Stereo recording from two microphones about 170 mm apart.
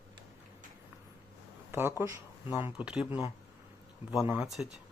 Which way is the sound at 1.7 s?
15° right (ahead or behind).